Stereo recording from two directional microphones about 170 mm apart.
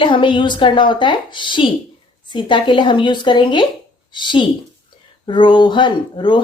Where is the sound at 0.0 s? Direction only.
30° left (ahead or behind).